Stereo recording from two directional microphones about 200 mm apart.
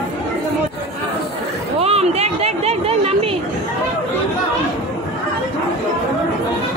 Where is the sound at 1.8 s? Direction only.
30° right (ahead or behind).